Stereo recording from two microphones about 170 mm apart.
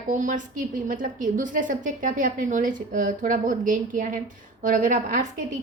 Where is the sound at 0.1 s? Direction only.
50° right (ahead or behind).